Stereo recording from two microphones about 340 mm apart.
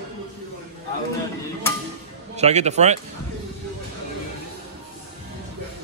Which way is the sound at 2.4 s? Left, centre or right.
Centre.